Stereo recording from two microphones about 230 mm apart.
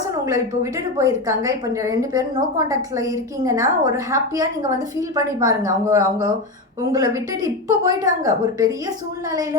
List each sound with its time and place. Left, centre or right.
0.3 s a woman's voice: centre